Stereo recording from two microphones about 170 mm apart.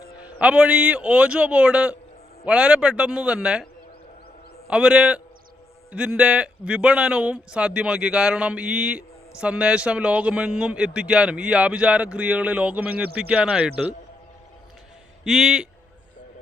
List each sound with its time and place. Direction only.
0.2 s a man's voice: 5° right (ahead or behind)
4.7 s a man's voice: 5° right (ahead or behind)
15.2 s a man's voice: centre (ahead or behind)